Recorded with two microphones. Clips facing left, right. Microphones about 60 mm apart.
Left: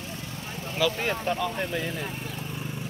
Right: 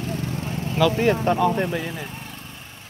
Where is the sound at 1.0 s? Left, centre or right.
Centre.